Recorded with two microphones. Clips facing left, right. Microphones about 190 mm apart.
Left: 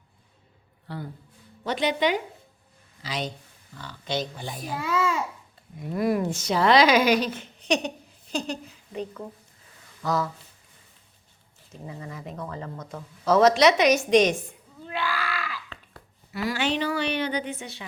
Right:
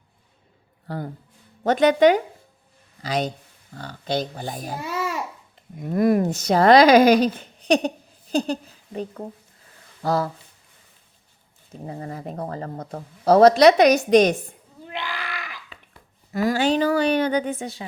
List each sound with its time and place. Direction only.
0.9 s a woman's voice: 45° right (ahead or behind)
5.8 s a woman's voice: 50° right (ahead or behind); by 10.2 s 30° right (ahead or behind)
11.9 s a woman's voice: 45° right (ahead or behind)
14.8 s screaming: 20° right (ahead or behind)
16.3 s a woman's voice: 45° right (ahead or behind)